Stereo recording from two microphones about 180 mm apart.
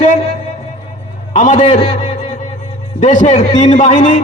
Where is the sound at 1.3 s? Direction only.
45° left (ahead or behind).